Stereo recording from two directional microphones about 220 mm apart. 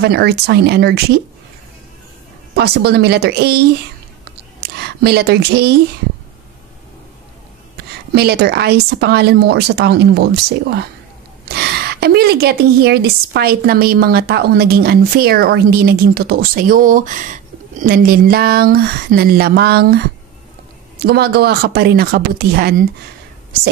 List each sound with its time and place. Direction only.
0.0 s a woman's voice: 45° right (ahead or behind)
2.5 s a woman's voice: 45° right (ahead or behind)
4.2 s a sound: 45° right (ahead or behind)
8.1 s a woman's voice: 45° right (ahead or behind)